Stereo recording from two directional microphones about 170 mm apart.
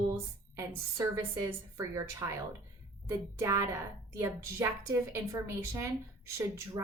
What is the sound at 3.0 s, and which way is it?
A woman's voice, 15° right (ahead or behind).